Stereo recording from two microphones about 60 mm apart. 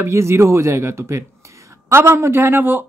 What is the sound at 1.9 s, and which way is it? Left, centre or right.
Speech, right.